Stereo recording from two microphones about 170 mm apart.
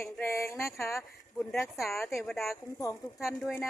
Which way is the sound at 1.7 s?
Centre (ahead or behind).